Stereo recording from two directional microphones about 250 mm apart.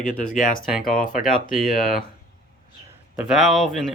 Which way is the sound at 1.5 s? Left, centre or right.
Left.